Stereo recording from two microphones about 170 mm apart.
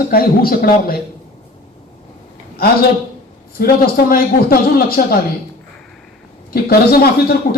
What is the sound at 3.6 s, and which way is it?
A man's voice, 60° left (ahead or behind).